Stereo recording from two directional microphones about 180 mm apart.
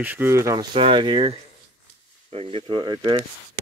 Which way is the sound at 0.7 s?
30° right (ahead or behind).